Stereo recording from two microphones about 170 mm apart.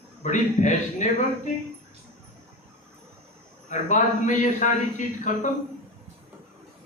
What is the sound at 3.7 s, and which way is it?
A man's voice, 45° left (ahead or behind).